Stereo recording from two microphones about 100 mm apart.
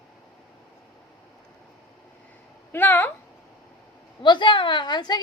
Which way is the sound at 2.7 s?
20° left (ahead or behind).